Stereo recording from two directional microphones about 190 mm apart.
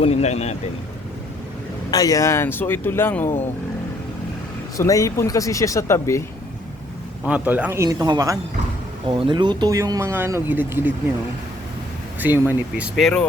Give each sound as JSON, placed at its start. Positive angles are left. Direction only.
{"t": 0.0, "sound": "speech", "side_deg": 35}
{"t": 1.9, "sound": "speech", "side_deg": 20}
{"t": 4.8, "sound": "speech", "side_deg": 15}
{"t": 7.3, "sound": "speech", "side_deg": -5}
{"t": 12.2, "sound": "speech", "side_deg": -10}